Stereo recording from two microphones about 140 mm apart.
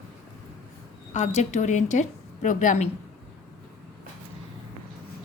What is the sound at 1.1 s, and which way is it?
A woman's voice, 55° left (ahead or behind).